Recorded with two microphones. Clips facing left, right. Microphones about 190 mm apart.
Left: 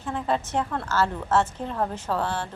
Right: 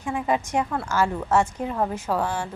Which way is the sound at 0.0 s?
10° right (ahead or behind).